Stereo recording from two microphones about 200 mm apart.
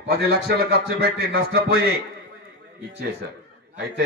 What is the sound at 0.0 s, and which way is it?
A man's voice, 50° right (ahead or behind).